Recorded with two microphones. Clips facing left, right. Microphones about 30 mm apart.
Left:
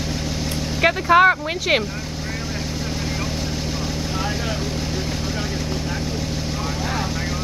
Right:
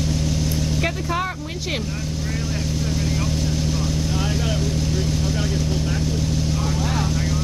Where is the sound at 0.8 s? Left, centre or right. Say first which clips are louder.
Left 15 dB; left.